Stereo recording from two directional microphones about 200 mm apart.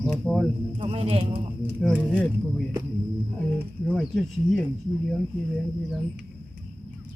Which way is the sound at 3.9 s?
Centre (ahead or behind).